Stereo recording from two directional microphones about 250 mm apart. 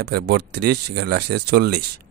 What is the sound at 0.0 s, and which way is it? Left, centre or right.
Speech, right.